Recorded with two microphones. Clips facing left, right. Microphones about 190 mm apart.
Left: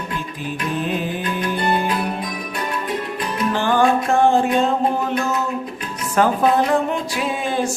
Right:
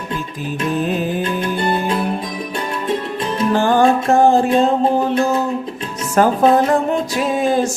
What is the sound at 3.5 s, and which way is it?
Music, 45° right (ahead or behind).